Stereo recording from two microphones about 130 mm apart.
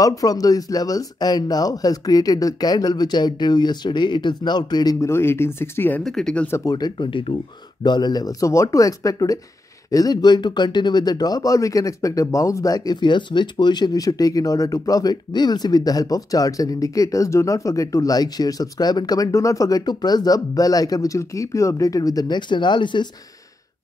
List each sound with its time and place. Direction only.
0.0 s speech: 25° left (ahead or behind)
5.1 s speech: 20° left (ahead or behind)
6.0 s speech: 5° left (ahead or behind)
6.4 s speech: 25° left (ahead or behind)